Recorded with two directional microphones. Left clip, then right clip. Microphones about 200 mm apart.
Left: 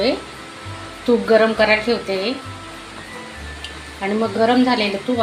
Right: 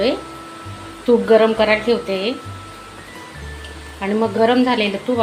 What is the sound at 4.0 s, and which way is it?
A woman's voice, centre (ahead or behind).